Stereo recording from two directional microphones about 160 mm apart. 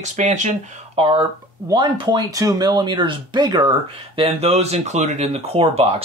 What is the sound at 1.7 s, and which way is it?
Speech, 25° right (ahead or behind).